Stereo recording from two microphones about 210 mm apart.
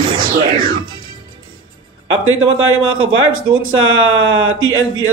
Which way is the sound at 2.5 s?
75° right (ahead or behind).